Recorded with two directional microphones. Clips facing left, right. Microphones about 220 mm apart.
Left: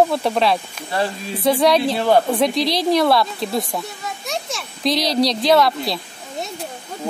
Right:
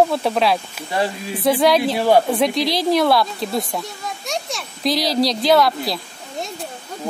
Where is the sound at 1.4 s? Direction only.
Centre (ahead or behind).